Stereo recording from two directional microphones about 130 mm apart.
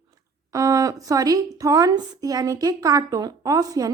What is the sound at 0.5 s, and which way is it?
A woman's voice, 25° right (ahead or behind).